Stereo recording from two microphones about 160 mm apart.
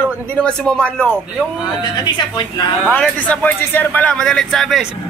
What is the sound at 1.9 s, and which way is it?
Speech, 25° left (ahead or behind).